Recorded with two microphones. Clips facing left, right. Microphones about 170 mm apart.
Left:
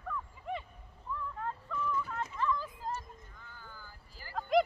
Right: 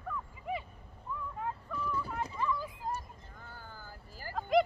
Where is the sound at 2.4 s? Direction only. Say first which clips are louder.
Left 2 dB; 10° right (ahead or behind).